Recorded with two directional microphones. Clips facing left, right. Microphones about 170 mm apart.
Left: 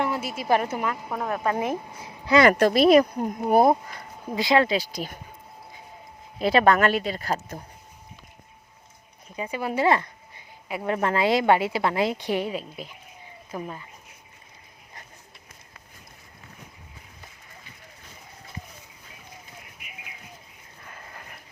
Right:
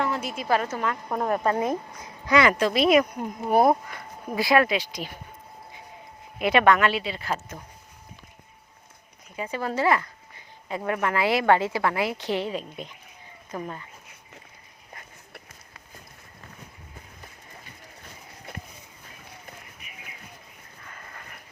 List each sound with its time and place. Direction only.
0.0 s a sound: 10° left (ahead or behind)
0.4 s speech: 15° left (ahead or behind)
2.0 s speech: 25° left (ahead or behind)
2.5 s speech: 55° left (ahead or behind)
2.7 s speech: 35° left (ahead or behind)
6.4 s speech: 35° left (ahead or behind)
9.3 s speech: 15° left (ahead or behind)
9.8 s speech: 25° left (ahead or behind)
12.1 s speech: 15° left (ahead or behind)